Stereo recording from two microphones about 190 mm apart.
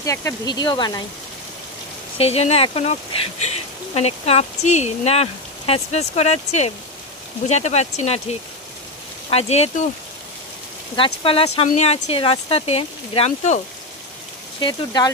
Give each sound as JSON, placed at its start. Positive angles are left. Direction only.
{"t": 0.0, "sound": "speech", "side_deg": 15}
{"t": 2.1, "sound": "speech", "side_deg": 35}
{"t": 11.0, "sound": "speech", "side_deg": 30}
{"t": 14.6, "sound": "speech", "side_deg": 20}